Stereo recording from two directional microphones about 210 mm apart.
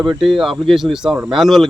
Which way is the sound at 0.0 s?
Centre (ahead or behind).